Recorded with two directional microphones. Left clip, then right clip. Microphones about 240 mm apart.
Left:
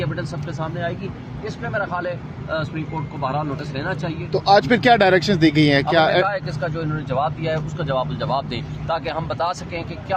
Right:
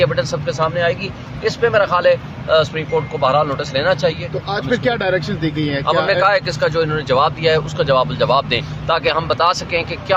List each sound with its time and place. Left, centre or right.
0.0 s speech: centre
4.4 s speech: left
6.2 s speech: centre